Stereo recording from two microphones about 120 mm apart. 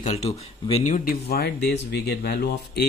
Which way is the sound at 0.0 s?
70° left (ahead or behind).